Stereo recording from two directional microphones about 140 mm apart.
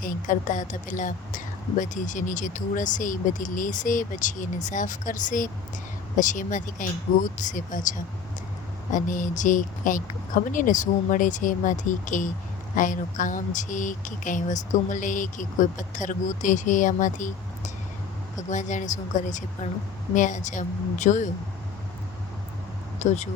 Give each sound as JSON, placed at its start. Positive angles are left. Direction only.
{"t": 0.0, "sound": "a woman's voice", "side_deg": 70}
{"t": 23.0, "sound": "speech", "side_deg": 55}